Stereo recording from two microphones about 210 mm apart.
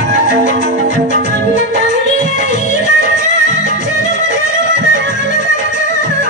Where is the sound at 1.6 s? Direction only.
35° left (ahead or behind).